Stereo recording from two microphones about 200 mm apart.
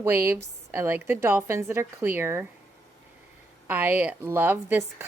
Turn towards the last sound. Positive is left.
turn(degrees=-10)  # may be behind; listen again after turning